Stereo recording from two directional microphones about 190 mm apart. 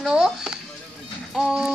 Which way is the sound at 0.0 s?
5° right (ahead or behind).